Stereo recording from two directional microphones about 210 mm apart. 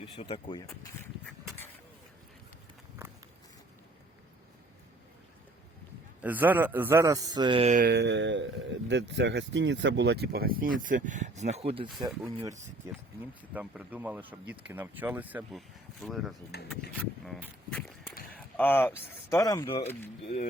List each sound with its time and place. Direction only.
0.0 s speech: 25° left (ahead or behind)
0.7 s speech: 15° left (ahead or behind)
6.2 s speech: 10° right (ahead or behind); by 7.8 s 25° right (ahead or behind)
7.8 s speech: 50° right (ahead or behind); by 19.9 s 25° left (ahead or behind)